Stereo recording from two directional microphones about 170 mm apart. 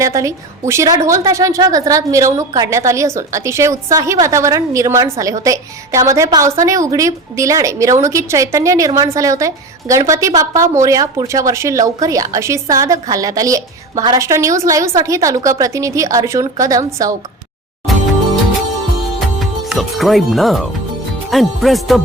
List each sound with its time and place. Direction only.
0.0 s a woman's voice: 20° right (ahead or behind)
19.4 s speech: centre (ahead or behind)